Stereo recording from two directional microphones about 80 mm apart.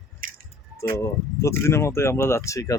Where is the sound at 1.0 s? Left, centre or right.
Left.